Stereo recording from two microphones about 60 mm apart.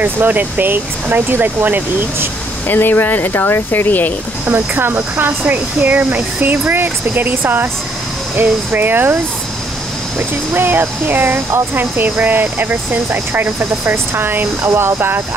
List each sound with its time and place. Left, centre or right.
0.0 s speech: right
2.7 s speech: left
4.5 s speech: right